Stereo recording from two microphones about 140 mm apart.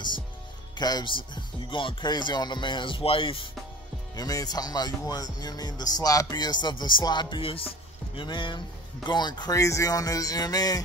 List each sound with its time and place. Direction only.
0.7 s speech: 30° left (ahead or behind)
4.1 s speech: 25° left (ahead or behind)